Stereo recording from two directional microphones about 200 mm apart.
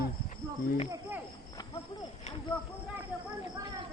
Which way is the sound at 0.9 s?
10° right (ahead or behind).